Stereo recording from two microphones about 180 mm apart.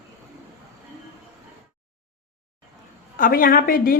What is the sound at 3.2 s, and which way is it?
Speech, 55° left (ahead or behind).